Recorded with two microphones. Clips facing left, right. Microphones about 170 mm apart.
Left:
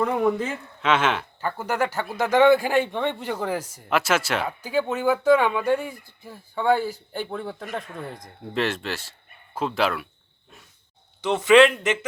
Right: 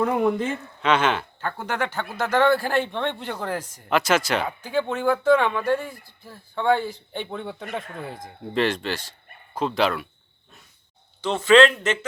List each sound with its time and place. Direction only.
0.0 s speech: 5° right (ahead or behind)
11.2 s speech: 15° left (ahead or behind)